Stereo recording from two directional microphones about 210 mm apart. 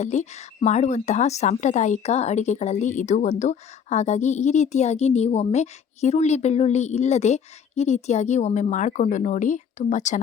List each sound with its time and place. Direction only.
0.0 s a woman's voice: 35° left (ahead or behind)